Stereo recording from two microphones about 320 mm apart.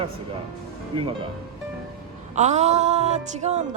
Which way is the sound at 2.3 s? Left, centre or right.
Right.